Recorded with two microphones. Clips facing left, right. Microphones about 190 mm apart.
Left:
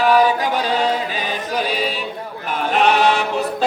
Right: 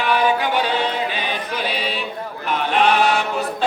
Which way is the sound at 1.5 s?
45° left (ahead or behind).